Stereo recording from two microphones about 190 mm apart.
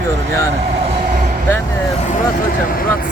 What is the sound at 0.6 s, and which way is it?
Vehicle, 35° right (ahead or behind).